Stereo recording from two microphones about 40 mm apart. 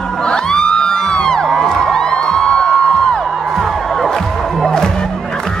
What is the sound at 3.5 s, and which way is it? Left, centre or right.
Music, centre.